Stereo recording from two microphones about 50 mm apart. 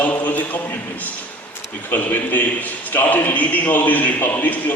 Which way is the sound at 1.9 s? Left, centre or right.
Left.